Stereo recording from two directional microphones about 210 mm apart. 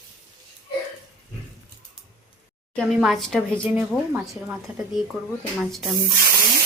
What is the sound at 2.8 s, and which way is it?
Speech, centre (ahead or behind).